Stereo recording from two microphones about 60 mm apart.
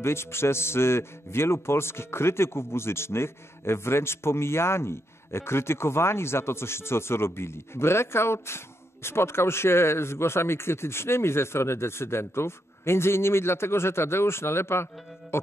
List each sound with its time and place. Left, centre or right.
0.0 s speech: left
15.3 s music: left